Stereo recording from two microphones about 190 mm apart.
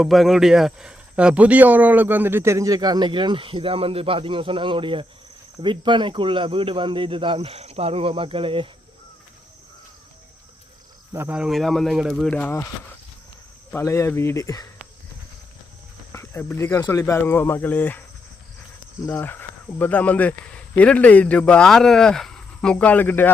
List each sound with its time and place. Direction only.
0.0 s speech: centre (ahead or behind); by 8.7 s 30° right (ahead or behind)
11.1 s speech: 10° right (ahead or behind); by 12.6 s 10° left (ahead or behind)
13.7 s speech: 15° left (ahead or behind)
16.1 s speech: 10° left (ahead or behind)
19.0 s speech: 10° left (ahead or behind)